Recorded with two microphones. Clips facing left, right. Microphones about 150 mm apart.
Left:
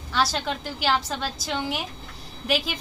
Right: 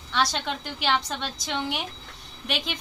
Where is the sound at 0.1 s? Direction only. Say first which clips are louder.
Left 1 dB; 5° left (ahead or behind).